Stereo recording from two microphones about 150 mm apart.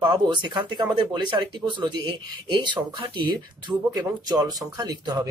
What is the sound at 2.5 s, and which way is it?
Speech, 30° right (ahead or behind).